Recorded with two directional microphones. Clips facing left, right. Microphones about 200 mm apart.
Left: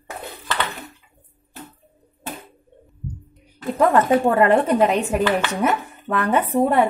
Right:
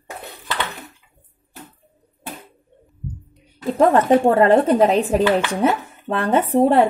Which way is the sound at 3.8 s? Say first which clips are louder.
Right 2 dB; 30° right (ahead or behind).